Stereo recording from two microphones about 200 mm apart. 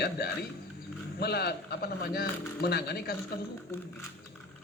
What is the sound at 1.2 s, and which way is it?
Speech, 55° left (ahead or behind).